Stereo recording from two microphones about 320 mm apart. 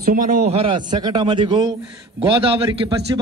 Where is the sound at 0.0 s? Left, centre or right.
Right.